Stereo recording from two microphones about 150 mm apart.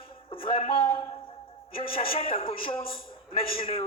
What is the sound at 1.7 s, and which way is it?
A man's voice, 40° left (ahead or behind).